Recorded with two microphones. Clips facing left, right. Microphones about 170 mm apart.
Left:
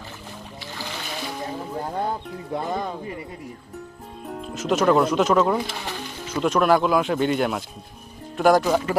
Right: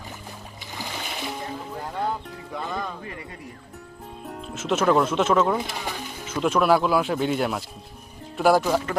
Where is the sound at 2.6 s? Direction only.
25° left (ahead or behind).